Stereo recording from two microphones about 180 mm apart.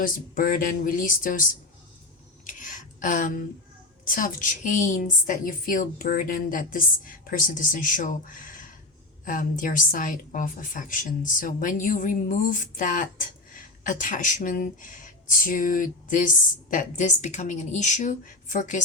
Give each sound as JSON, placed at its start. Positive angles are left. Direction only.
{"t": 0.0, "sound": "speech", "side_deg": 50}
{"t": 2.5, "sound": "a sound", "side_deg": 45}
{"t": 4.0, "sound": "speech", "side_deg": 50}